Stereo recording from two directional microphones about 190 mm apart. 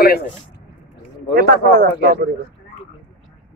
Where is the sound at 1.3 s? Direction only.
60° right (ahead or behind).